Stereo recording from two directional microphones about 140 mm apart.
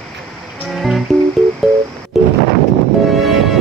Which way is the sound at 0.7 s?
Centre (ahead or behind).